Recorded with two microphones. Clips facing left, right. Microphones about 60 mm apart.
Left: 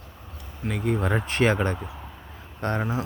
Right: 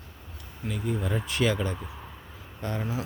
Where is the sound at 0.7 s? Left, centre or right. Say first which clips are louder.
Left 5 dB; left.